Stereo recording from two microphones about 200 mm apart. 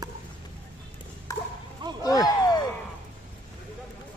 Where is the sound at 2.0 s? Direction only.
20° left (ahead or behind).